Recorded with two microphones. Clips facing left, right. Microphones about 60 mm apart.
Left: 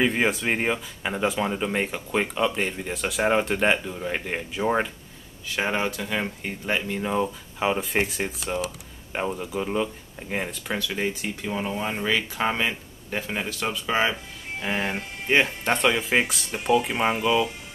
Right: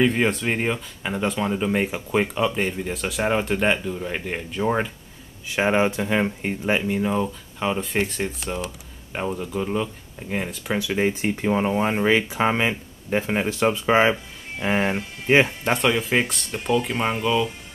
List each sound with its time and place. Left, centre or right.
0.0 s speech: centre
5.5 s speech: centre
7.1 s speech: centre
10.7 s speech: centre
14.6 s speech: centre
15.6 s speech: centre